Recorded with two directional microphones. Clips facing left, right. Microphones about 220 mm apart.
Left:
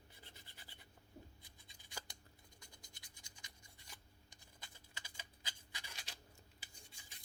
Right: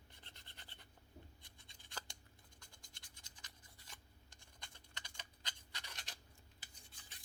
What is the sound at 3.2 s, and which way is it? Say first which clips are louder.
Rub: left 1 dB; 10° left (ahead or behind).